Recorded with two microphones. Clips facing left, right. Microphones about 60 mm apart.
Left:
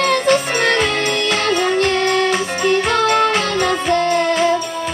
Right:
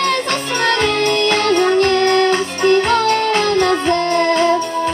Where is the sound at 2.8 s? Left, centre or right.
Left.